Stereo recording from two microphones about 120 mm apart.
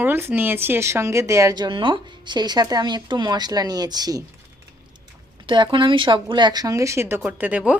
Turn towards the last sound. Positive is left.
turn(degrees=-10)  # may be behind; listen again after turning